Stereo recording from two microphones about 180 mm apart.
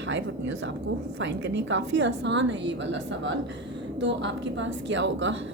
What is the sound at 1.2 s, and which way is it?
A woman's voice, 90° right.